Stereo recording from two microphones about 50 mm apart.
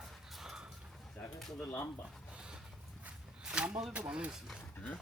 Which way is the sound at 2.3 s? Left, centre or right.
Centre.